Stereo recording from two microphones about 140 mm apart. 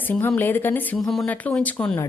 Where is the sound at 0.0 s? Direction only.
15° left (ahead or behind).